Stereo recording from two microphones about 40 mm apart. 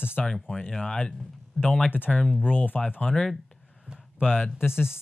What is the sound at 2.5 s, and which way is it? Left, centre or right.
Speech, left.